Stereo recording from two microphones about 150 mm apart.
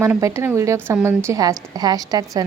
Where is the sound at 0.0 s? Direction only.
20° right (ahead or behind).